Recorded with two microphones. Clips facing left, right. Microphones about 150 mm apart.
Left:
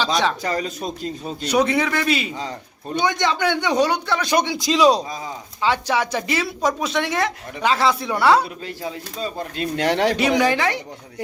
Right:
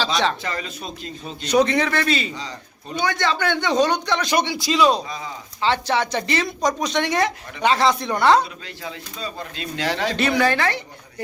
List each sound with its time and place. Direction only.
0.4 s speech: 40° left (ahead or behind)
1.5 s a woman's voice: 10° left (ahead or behind)
5.6 s a woman's voice: 10° left (ahead or behind)
8.6 s speech: 45° left (ahead or behind); by 10.2 s 60° left (ahead or behind)
10.2 s a woman's voice: 15° left (ahead or behind)